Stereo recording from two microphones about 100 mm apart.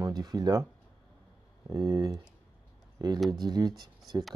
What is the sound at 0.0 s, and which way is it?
Speech, 45° right (ahead or behind).